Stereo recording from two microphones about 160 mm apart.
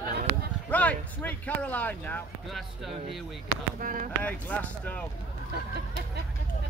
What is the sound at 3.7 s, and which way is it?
Speech, 55° right (ahead or behind).